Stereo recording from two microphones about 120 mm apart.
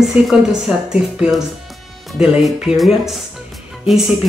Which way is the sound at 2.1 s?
5° right (ahead or behind).